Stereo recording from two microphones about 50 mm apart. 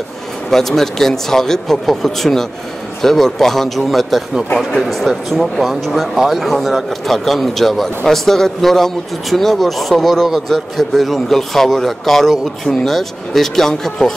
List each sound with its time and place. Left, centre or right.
0.5 s a man's voice: centre